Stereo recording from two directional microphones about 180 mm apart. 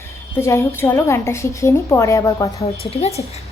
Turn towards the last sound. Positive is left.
turn(degrees=35)  # may be behind; listen again after turning